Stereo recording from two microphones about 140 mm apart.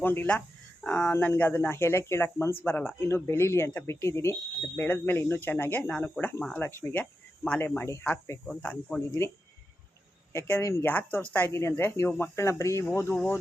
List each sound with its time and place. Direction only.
0.0 s speech: 15° left (ahead or behind)
10.3 s speech: 20° left (ahead or behind)